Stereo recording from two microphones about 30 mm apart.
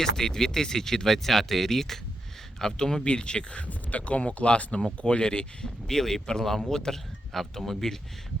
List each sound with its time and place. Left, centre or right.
0.0 s speech: left
3.0 s speech: left
3.7 s speech: left
5.0 s speech: left
5.9 s speech: centre